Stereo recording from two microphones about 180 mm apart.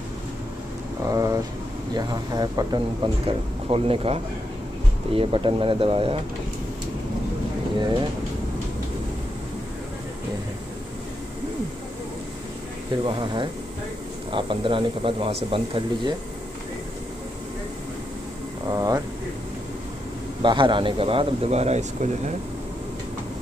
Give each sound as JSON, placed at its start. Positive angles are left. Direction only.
{"t": 1.1, "sound": "speech", "side_deg": -20}
{"t": 7.8, "sound": "speech", "side_deg": -25}
{"t": 13.0, "sound": "speech", "side_deg": -25}
{"t": 18.7, "sound": "speech", "side_deg": -20}
{"t": 20.4, "sound": "speech", "side_deg": -25}